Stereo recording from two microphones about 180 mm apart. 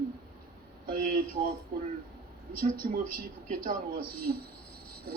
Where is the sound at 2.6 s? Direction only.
55° right (ahead or behind).